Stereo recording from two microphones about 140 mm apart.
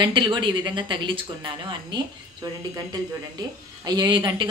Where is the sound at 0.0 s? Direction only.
35° right (ahead or behind).